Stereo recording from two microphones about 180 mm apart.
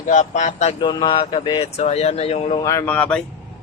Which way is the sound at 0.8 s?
25° left (ahead or behind).